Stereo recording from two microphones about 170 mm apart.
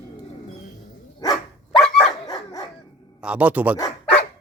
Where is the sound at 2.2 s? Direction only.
25° left (ahead or behind).